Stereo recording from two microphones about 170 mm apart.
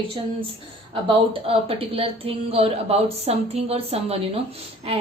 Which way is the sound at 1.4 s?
35° right (ahead or behind).